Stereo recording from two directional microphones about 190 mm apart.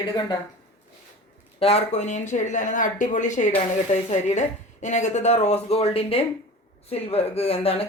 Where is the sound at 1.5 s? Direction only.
30° left (ahead or behind).